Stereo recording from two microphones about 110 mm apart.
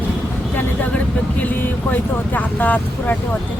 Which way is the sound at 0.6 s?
15° left (ahead or behind).